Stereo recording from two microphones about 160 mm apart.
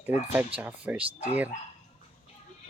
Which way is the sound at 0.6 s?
10° right (ahead or behind).